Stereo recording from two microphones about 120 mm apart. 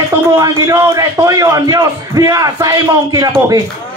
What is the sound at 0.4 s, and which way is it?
A man's voice, 30° right (ahead or behind).